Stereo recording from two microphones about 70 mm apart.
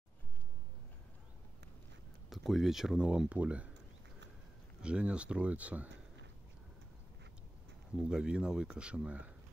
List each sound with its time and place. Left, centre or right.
2.2 s speech: centre
4.8 s speech: centre
7.9 s speech: centre